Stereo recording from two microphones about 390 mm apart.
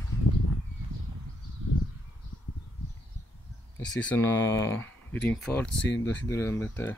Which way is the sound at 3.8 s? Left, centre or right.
Centre.